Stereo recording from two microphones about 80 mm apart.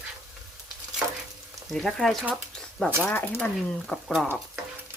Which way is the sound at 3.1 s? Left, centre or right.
Left.